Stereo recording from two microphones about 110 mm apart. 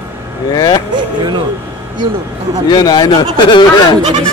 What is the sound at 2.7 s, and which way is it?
Speech, 40° left (ahead or behind).